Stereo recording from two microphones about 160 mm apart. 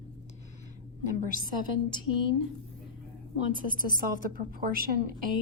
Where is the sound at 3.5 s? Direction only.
60° right (ahead or behind).